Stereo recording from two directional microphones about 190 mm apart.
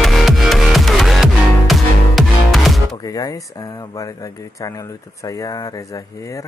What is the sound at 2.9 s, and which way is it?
Speech, 20° left (ahead or behind).